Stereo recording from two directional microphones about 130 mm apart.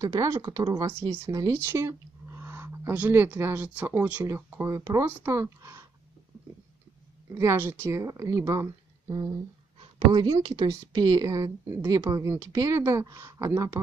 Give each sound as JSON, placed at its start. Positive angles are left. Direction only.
{"t": 0.0, "sound": "speech", "side_deg": -25}
{"t": 7.3, "sound": "speech", "side_deg": -20}
{"t": 9.8, "sound": "a sound", "side_deg": -40}
{"t": 10.3, "sound": "speech", "side_deg": -30}